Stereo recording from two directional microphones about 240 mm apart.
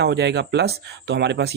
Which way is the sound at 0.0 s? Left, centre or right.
Right.